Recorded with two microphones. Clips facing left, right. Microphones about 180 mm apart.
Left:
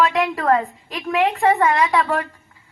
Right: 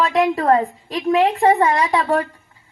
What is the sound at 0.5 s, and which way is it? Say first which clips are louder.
Speech: right 4 dB; 35° right (ahead or behind).